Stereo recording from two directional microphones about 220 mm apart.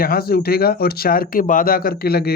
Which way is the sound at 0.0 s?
45° left (ahead or behind).